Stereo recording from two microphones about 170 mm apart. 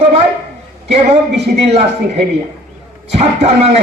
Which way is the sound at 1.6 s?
40° right (ahead or behind).